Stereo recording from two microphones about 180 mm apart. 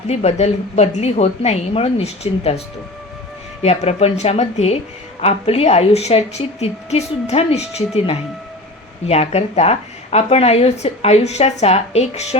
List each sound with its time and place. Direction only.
0.1 s speech: 35° left (ahead or behind)
3.6 s speech: 35° left (ahead or behind)